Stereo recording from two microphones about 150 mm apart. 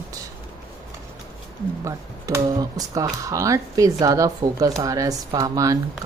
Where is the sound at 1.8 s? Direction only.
20° right (ahead or behind).